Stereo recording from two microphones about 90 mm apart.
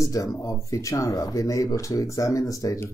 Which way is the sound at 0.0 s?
35° left (ahead or behind).